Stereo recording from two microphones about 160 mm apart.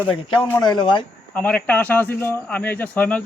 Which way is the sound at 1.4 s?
10° left (ahead or behind).